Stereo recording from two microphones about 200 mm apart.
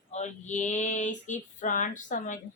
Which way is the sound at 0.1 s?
35° left (ahead or behind).